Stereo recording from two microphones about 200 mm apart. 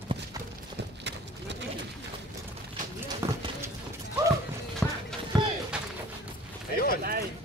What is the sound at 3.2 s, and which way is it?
Clip-clop, 15° right (ahead or behind).